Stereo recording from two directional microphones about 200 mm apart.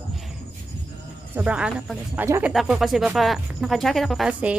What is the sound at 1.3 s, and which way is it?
Speech, 5° right (ahead or behind).